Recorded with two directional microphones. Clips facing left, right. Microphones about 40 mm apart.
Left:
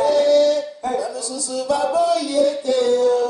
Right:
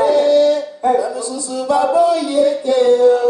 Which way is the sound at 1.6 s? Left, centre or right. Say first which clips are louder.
Right 5 dB; right.